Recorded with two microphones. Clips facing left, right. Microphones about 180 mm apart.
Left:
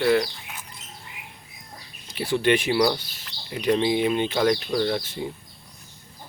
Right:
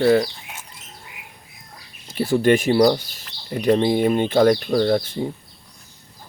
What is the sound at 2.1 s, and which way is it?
Speech, 45° right (ahead or behind).